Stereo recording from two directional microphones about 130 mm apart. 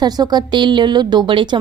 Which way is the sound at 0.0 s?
30° right (ahead or behind).